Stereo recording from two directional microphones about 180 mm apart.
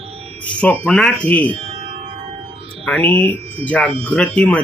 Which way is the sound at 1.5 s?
30° right (ahead or behind).